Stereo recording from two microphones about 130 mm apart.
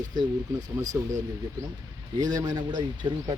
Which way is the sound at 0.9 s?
20° right (ahead or behind).